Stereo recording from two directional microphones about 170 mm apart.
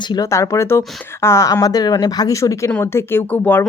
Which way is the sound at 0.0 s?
25° left (ahead or behind).